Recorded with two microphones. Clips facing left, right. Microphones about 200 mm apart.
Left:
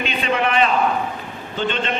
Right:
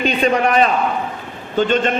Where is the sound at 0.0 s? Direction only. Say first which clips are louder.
Right 5 dB; 40° right (ahead or behind).